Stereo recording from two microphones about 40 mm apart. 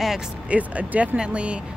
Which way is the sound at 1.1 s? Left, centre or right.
Right.